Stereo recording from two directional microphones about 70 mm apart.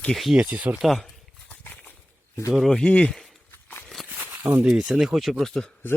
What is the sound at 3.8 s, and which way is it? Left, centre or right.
Walk, centre.